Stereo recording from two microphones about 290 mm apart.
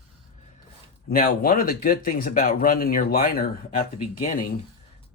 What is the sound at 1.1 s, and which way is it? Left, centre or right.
Speech, left.